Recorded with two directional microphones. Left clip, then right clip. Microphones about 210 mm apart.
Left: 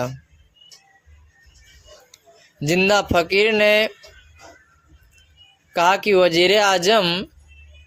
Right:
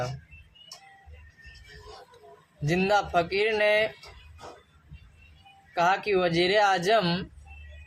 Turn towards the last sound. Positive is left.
turn(degrees=45)  # may be behind; listen again after turning